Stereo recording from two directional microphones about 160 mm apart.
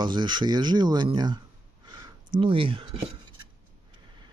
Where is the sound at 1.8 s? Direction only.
25° right (ahead or behind).